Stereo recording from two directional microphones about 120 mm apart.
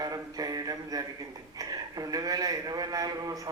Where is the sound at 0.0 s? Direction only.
30° right (ahead or behind).